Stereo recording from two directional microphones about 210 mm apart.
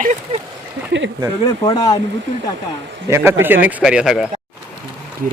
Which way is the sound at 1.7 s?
15° left (ahead or behind).